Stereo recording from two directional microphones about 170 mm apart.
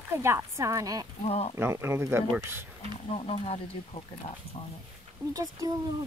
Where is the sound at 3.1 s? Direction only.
35° left (ahead or behind).